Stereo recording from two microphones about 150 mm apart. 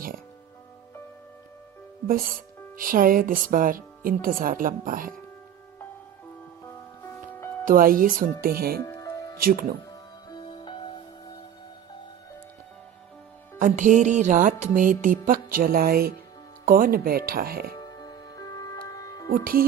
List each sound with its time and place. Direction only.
2.7 s speech: 70° right (ahead or behind)
6.7 s music: 15° left (ahead or behind)
7.6 s speech: 70° right (ahead or behind); by 8.8 s 85° right
8.8 s music: 20° left (ahead or behind)
9.4 s speech: 75° right (ahead or behind)
9.9 s music: 30° left (ahead or behind)
13.6 s music: 60° right (ahead or behind); by 16.1 s 90° right
16.6 s speech: 70° right (ahead or behind); by 17.7 s 90° right
17.7 s music: 25° left (ahead or behind)